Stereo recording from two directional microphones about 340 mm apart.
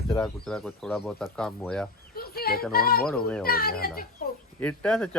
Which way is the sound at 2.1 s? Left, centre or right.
Left.